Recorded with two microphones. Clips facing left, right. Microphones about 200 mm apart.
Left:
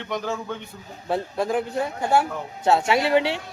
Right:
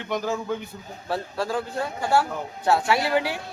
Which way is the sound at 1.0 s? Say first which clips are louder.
Left 3 dB; 20° left (ahead or behind).